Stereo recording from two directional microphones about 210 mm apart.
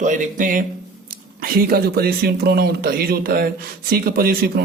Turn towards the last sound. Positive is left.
turn(degrees=-45)  # may be behind; listen again after turning